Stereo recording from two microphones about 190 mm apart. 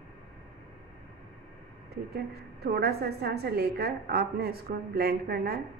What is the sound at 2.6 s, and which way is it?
A woman's voice, 55° right (ahead or behind).